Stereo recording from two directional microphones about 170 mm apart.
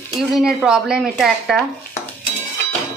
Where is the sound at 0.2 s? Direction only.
5° right (ahead or behind).